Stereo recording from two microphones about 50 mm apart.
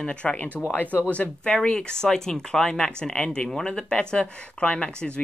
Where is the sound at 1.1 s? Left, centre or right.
Left.